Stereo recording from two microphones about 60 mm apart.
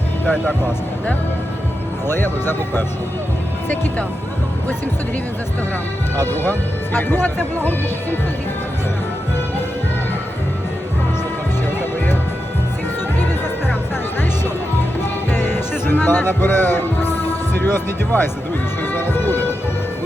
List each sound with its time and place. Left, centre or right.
2.0 s speech: left
6.1 s speech: left
15.3 s music: left